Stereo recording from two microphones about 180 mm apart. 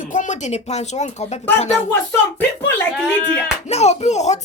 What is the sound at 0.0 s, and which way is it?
Speech, 45° left (ahead or behind).